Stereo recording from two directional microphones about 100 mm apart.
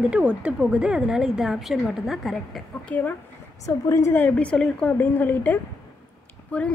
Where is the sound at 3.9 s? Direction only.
30° left (ahead or behind).